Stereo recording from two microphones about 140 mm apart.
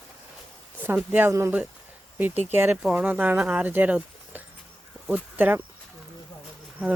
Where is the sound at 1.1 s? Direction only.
15° right (ahead or behind).